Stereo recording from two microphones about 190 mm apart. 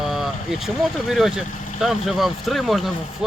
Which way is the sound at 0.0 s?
Centre (ahead or behind).